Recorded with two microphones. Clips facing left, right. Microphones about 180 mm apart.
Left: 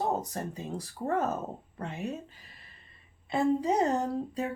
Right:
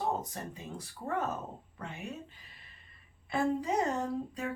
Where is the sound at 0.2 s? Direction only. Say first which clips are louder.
Left 5 dB; 40° left (ahead or behind).